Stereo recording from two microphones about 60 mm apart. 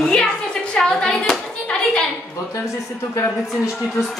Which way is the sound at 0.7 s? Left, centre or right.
Centre.